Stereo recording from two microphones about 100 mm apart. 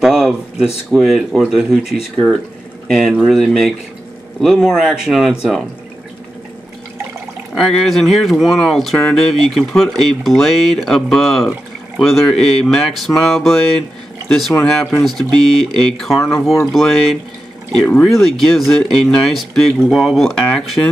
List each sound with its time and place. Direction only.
0.0 s a sound: 5° right (ahead or behind)
0.9 s speech: centre (ahead or behind)
7.5 s speech: 5° left (ahead or behind)
18.2 s speech: centre (ahead or behind)